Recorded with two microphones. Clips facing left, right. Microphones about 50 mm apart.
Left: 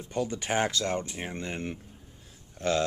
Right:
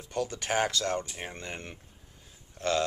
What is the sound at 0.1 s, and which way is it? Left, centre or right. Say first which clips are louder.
Speech: left 1 dB; centre.